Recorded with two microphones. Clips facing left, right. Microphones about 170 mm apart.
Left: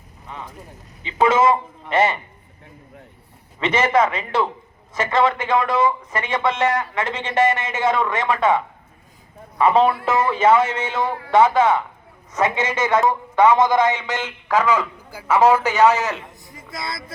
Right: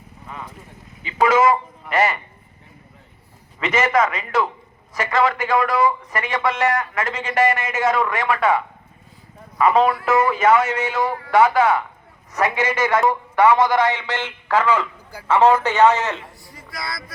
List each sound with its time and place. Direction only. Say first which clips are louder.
1.0 s a man's voice: even; 25° left (ahead or behind)
3.6 s a man's voice: left 1 dB; 30° left (ahead or behind); by 16.2 s 5° left (ahead or behind)
16.5 s a sound: left 1 dB; 20° left (ahead or behind)